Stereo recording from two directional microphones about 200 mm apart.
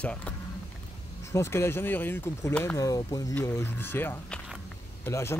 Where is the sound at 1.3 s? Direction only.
15° left (ahead or behind).